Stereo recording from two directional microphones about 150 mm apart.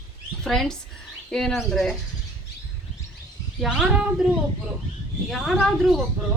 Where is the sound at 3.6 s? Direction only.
Centre (ahead or behind).